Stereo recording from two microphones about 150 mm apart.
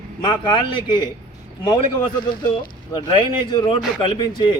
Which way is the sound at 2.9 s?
35° left (ahead or behind).